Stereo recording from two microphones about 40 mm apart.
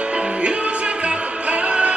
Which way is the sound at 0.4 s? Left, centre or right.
Right.